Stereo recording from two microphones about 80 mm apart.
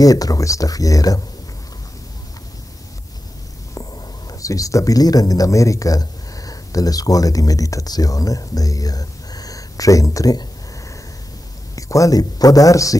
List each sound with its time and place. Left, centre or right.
0.0 s speech: left
4.3 s speech: left
11.7 s speech: left